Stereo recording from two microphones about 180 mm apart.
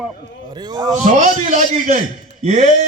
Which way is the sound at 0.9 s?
45° right (ahead or behind).